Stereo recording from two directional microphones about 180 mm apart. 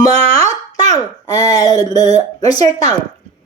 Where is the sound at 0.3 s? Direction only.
20° left (ahead or behind).